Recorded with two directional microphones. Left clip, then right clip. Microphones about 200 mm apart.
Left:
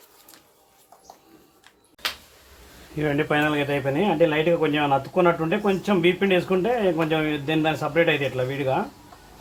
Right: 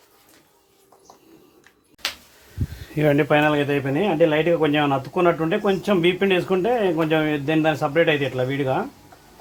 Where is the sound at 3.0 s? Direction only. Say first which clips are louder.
Right 5 dB; 55° right (ahead or behind).